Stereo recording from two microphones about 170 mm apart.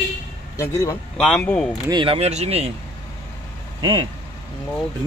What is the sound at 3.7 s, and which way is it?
Speech, 25° right (ahead or behind).